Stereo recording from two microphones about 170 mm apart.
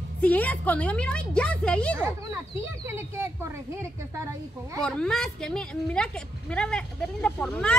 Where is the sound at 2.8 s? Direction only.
15° right (ahead or behind).